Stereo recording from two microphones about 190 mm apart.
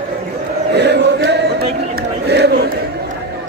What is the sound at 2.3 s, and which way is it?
Battle cry, 60° right (ahead or behind).